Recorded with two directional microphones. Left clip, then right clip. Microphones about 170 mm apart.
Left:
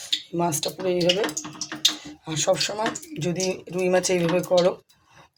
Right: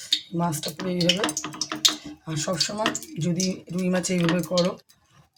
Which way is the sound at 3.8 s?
35° left (ahead or behind).